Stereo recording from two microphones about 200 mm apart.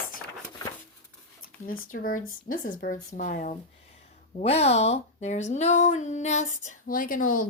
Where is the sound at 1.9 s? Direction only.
45° left (ahead or behind).